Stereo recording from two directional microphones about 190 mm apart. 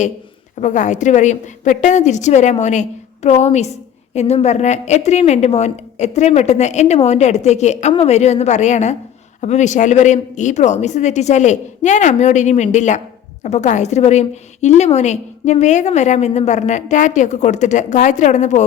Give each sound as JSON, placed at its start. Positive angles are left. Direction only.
{"t": 0.6, "sound": "a woman's voice", "side_deg": 40}